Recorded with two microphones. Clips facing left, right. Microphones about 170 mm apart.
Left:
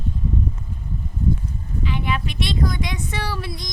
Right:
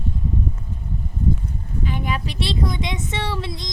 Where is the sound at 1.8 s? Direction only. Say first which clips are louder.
Left 1 dB; 45° right (ahead or behind); by 3.7 s 25° right (ahead or behind).